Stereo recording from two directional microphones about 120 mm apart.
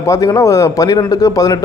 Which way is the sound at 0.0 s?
30° left (ahead or behind).